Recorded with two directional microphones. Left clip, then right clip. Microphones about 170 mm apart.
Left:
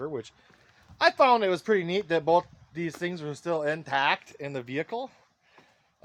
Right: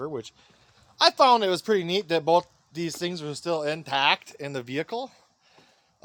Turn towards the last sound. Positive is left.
turn(degrees=-20)  # may be behind; listen again after turning